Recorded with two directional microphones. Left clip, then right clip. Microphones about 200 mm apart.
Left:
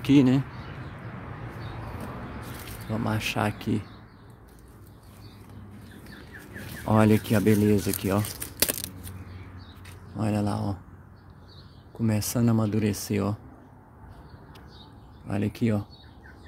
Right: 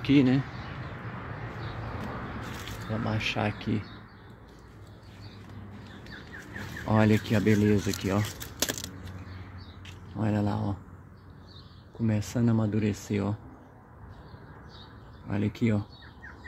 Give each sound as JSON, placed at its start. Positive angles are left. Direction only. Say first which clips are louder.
{"t": 0.0, "sound": "speech", "louder": "left 3 dB", "side_deg": 20}
{"t": 2.9, "sound": "speech", "louder": "left 2 dB", "side_deg": 25}
{"t": 6.9, "sound": "speech", "louder": "left 3 dB", "side_deg": 15}
{"t": 10.1, "sound": "speech", "louder": "left 2 dB", "side_deg": 20}
{"t": 12.1, "sound": "speech", "louder": "left 3 dB", "side_deg": 30}
{"t": 15.2, "sound": "speech", "louder": "left 1 dB", "side_deg": 15}